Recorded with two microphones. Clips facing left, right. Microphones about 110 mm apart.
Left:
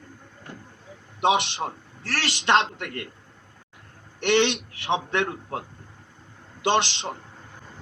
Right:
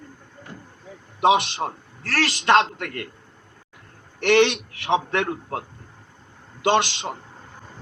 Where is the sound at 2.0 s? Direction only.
20° left (ahead or behind).